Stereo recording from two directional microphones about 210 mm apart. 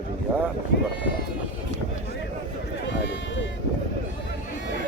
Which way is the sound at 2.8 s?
60° left (ahead or behind).